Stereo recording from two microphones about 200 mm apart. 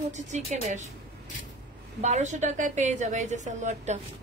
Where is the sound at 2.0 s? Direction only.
35° right (ahead or behind).